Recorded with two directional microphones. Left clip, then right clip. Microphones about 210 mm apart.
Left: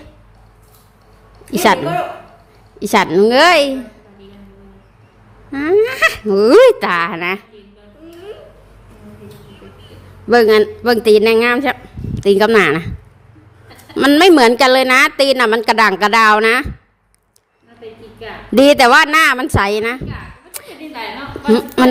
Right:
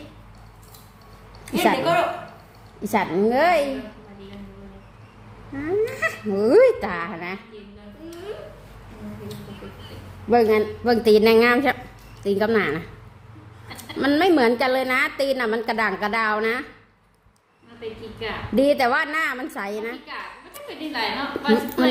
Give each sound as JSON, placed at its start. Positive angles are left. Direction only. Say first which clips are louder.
{"t": 2.8, "sound": "speech", "louder": "left 10 dB", "side_deg": 50}
{"t": 5.5, "sound": "speech", "louder": "left 11 dB", "side_deg": 50}
{"t": 10.2, "sound": "speech", "louder": "left 8 dB", "side_deg": 45}
{"t": 12.2, "sound": "a woman's voice", "louder": "left 11 dB", "side_deg": 40}
{"t": 13.9, "sound": "a woman's voice", "louder": "left 10 dB", "side_deg": 40}
{"t": 18.5, "sound": "speech", "louder": "left 11 dB", "side_deg": 45}
{"t": 20.9, "sound": "a woman's voice", "louder": "right 1 dB", "side_deg": 10}
{"t": 21.8, "sound": "a woman's voice", "louder": "left 10 dB", "side_deg": 40}